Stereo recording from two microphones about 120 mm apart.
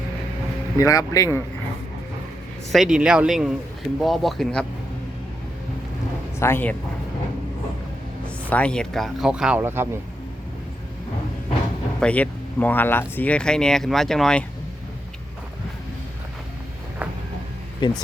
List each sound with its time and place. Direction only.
0.8 s speech: 30° left (ahead or behind)
2.7 s speech: 5° right (ahead or behind)
6.4 s speech: 15° left (ahead or behind)
8.4 s speech: 10° left (ahead or behind); by 9.6 s 5° right (ahead or behind)
9.6 s speech: 20° right (ahead or behind)
11.9 s speech: 10° left (ahead or behind)
17.8 s speech: 40° left (ahead or behind)